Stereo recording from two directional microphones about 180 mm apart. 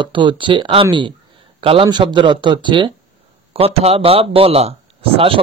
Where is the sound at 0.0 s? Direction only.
25° right (ahead or behind).